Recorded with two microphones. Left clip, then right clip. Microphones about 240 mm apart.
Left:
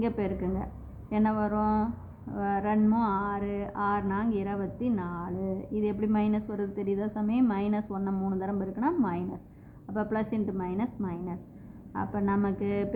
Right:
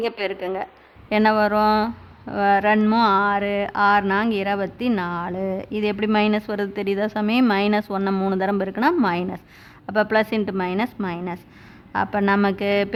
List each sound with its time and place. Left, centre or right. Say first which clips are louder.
0.0 s speech: right 7 dB; right